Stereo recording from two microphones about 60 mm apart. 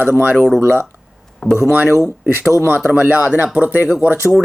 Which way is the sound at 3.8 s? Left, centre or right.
Centre.